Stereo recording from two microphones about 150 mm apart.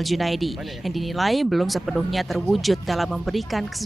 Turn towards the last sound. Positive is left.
turn(degrees=0)  # may be behind; listen again after turning